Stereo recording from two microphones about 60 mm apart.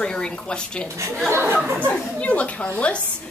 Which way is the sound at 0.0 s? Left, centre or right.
Centre.